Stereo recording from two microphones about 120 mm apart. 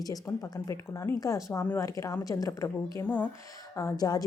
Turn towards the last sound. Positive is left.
turn(degrees=30)  # may be behind; listen again after turning